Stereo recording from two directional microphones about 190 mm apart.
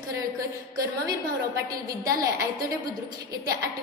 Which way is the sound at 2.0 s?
20° right (ahead or behind).